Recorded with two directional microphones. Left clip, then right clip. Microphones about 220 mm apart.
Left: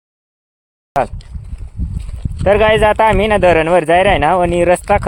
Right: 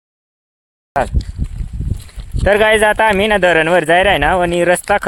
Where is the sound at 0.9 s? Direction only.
5° left (ahead or behind).